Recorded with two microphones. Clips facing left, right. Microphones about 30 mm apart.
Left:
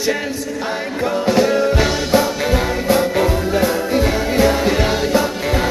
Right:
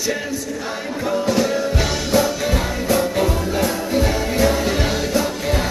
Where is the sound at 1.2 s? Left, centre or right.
Left.